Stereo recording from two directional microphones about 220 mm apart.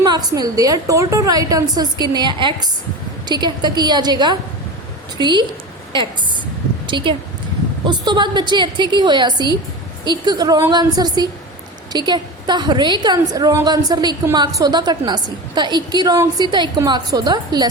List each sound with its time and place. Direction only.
0.0 s a woman's voice: 20° right (ahead or behind)
5.9 s a sound: 20° right (ahead or behind)
6.8 s a woman's voice: 20° right (ahead or behind)